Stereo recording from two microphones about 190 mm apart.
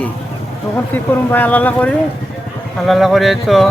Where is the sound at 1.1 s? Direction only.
10° left (ahead or behind).